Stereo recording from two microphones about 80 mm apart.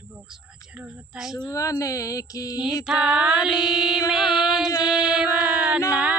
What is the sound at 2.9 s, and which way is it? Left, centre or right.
Speech, centre.